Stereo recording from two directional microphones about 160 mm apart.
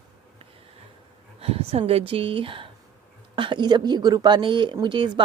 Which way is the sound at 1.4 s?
35° right (ahead or behind).